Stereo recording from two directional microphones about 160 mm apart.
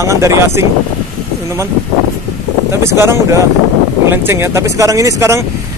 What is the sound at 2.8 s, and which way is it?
Speech, 15° right (ahead or behind).